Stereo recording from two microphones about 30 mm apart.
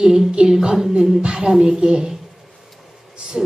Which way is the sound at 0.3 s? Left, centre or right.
Right.